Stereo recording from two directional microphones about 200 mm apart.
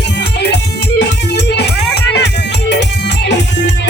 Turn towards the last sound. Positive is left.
turn(degrees=60)  # may be behind; listen again after turning